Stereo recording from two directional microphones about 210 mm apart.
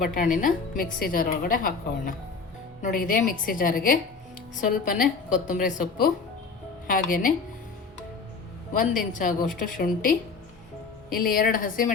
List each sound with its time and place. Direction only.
0.0 s a woman's voice: 40° left (ahead or behind)
8.7 s a woman's voice: 40° left (ahead or behind)